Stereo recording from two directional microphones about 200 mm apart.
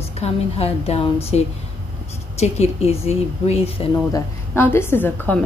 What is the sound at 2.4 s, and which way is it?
A woman's voice, 30° left (ahead or behind).